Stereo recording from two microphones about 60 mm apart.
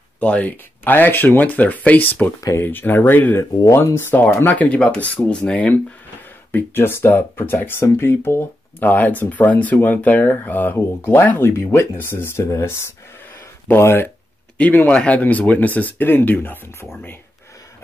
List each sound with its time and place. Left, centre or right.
0.2 s speech: left
3.6 s speech: left
4.5 s speech: left
5.4 s speech: centre
6.5 s speech: left
13.7 s speech: left
14.6 s speech: left